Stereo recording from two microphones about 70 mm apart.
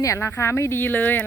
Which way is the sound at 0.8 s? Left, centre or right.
Left.